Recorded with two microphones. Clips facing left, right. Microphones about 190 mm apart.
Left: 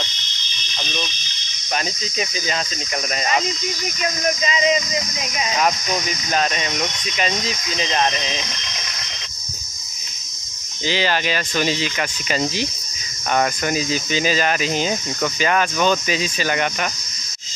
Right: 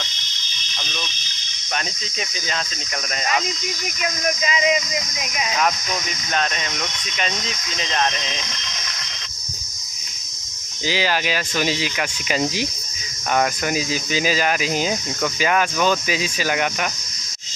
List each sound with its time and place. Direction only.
0.7 s water: 20° left (ahead or behind)
4.0 s speech: 5° right (ahead or behind)
6.3 s speech: 5° left (ahead or behind)
10.9 s speech: 5° right (ahead or behind)